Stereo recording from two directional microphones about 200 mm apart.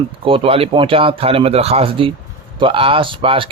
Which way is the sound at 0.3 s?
25° right (ahead or behind).